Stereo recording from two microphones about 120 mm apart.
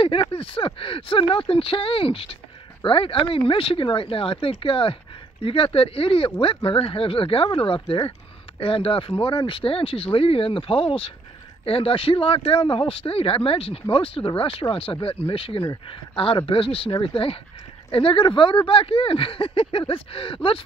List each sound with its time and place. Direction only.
0.0 s speech: 50° left (ahead or behind)